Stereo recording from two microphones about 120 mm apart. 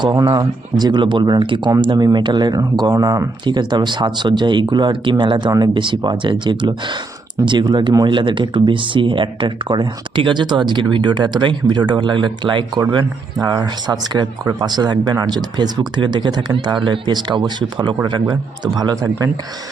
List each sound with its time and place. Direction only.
0.0 s speech: 40° right (ahead or behind)